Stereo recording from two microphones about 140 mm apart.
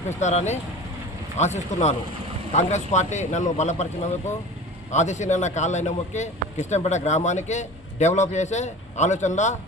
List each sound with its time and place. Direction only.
0.2 s speech: 55° left (ahead or behind)
4.9 s speech: 55° left (ahead or behind)